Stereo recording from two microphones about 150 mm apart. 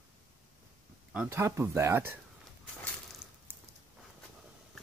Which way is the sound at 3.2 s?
5° right (ahead or behind).